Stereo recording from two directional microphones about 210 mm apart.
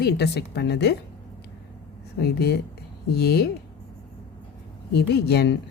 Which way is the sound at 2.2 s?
50° left (ahead or behind).